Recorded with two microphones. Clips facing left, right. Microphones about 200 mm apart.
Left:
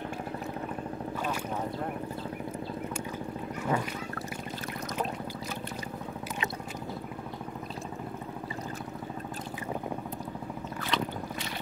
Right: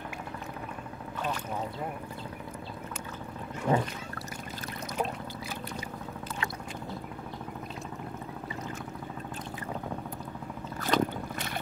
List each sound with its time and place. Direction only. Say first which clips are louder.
3.7 s speech: right 3 dB; 30° right (ahead or behind)
10.8 s boat: right 5 dB; 45° right (ahead or behind)